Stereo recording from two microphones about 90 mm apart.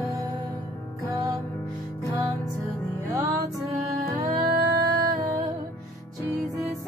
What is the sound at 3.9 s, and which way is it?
Music, 40° right (ahead or behind).